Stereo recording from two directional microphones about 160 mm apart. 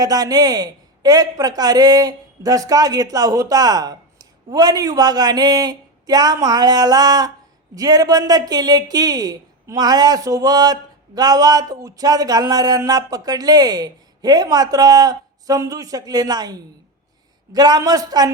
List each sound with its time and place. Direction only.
0.0 s a man's voice: 25° right (ahead or behind)